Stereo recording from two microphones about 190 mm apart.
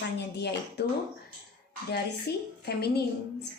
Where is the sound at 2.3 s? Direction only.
55° left (ahead or behind).